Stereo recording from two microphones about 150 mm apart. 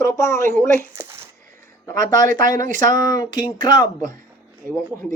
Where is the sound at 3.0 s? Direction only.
25° left (ahead or behind).